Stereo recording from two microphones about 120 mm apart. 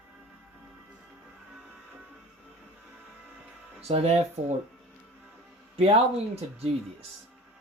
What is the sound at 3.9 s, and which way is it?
Speech, 55° right (ahead or behind).